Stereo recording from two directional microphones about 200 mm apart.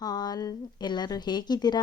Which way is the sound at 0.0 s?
20° left (ahead or behind).